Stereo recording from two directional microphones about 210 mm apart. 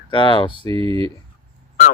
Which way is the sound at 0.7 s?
25° right (ahead or behind).